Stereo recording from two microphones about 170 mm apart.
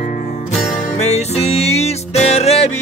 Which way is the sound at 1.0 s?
40° left (ahead or behind).